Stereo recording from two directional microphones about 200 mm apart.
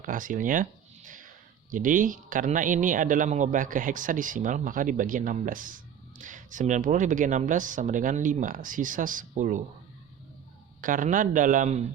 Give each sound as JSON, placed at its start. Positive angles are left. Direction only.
{"t": 0.0, "sound": "a sound", "side_deg": -40}
{"t": 1.7, "sound": "speech", "side_deg": -40}
{"t": 10.8, "sound": "speech", "side_deg": -40}